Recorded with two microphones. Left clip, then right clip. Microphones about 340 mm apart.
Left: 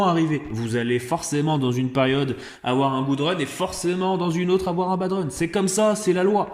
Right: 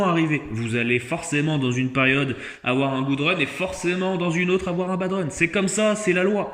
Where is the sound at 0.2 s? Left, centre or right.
Left.